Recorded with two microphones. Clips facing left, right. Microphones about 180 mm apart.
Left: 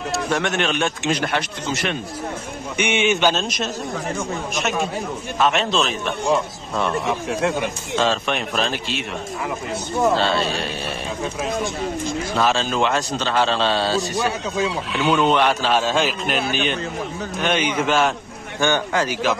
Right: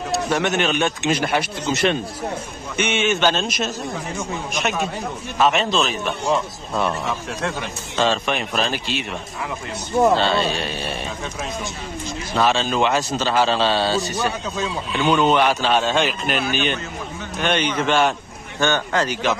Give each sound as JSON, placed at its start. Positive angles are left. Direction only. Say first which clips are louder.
{"t": 0.1, "sound": "a man's voice", "louder": "right 2 dB", "side_deg": 0}
{"t": 1.7, "sound": "speech", "louder": "right 5 dB", "side_deg": -25}
{"t": 2.8, "sound": "speech", "louder": "left 1 dB", "side_deg": 15}
{"t": 3.3, "sound": "a man's voice", "louder": "right 1 dB", "side_deg": 0}
{"t": 7.2, "sound": "speech", "louder": "left 5 dB", "side_deg": 10}
{"t": 8.0, "sound": "a man's voice", "louder": "right 1 dB", "side_deg": 0}
{"t": 10.1, "sound": "a man's voice", "louder": "right 1 dB", "side_deg": 0}
{"t": 12.4, "sound": "a man's voice", "louder": "right 2 dB", "side_deg": 0}